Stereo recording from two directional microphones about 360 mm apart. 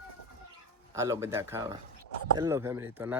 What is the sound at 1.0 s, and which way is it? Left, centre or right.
Speech, centre.